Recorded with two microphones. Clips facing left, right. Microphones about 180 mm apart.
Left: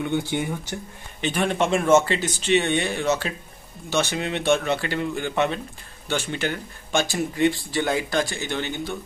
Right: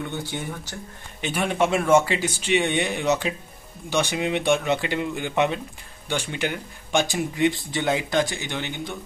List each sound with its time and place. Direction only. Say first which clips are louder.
0.0 s speech: left 6 dB; 15° left (ahead or behind)
1.2 s speech: even; 10° right (ahead or behind)